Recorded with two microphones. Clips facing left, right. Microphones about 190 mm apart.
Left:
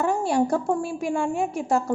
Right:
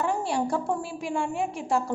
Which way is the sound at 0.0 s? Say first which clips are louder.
Left 5 dB; 45° left (ahead or behind).